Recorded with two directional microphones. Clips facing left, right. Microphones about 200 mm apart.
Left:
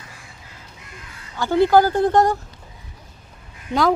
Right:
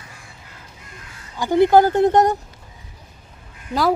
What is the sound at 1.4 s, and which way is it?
Speech, 15° right (ahead or behind).